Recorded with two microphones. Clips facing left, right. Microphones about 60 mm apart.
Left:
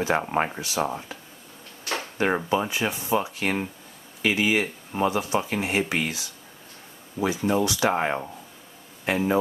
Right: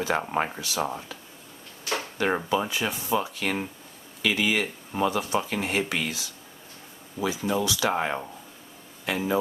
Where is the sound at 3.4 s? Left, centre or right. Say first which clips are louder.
Left 2 dB; left.